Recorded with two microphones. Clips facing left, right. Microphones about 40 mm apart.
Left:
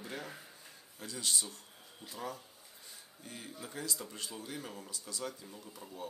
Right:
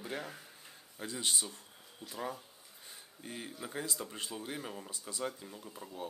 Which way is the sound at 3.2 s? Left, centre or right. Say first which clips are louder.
Right 3 dB; right.